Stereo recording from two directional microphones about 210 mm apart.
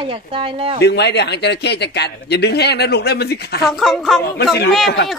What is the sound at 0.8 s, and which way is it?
Speech, 55° left (ahead or behind).